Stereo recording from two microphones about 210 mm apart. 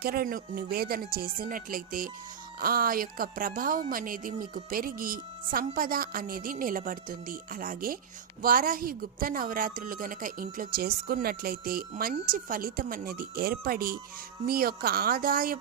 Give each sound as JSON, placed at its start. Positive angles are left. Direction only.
{"t": 0.0, "sound": "a woman's voice", "side_deg": -45}